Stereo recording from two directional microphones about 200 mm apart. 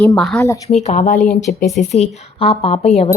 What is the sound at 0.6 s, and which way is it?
Speech, 35° left (ahead or behind).